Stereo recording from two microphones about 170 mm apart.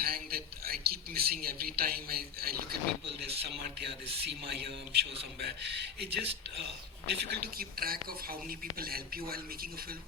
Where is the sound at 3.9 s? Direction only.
70° right (ahead or behind).